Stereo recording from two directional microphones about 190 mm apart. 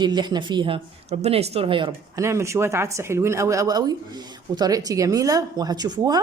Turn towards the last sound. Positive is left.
turn(degrees=-20)  # may be behind; listen again after turning